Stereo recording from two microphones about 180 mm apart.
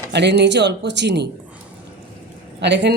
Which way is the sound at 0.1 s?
70° right (ahead or behind).